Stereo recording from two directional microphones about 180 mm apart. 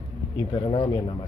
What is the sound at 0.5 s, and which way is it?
Speech, 30° left (ahead or behind).